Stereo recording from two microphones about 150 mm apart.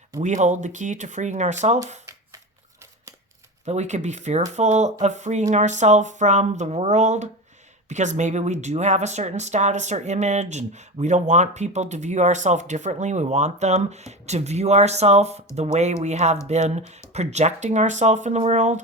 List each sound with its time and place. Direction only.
0.2 s speech: 55° right (ahead or behind)
3.7 s speech: 50° right (ahead or behind)